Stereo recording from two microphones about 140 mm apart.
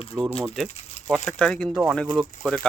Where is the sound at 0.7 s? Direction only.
50° left (ahead or behind).